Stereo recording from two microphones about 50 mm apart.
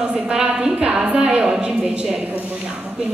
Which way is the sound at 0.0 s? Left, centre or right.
Centre.